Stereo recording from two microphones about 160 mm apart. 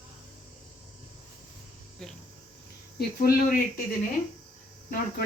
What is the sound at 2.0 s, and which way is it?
Cricket, 5° left (ahead or behind).